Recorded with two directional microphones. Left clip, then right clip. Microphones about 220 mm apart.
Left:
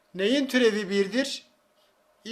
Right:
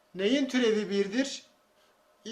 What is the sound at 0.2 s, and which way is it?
A man's voice, 40° left (ahead or behind).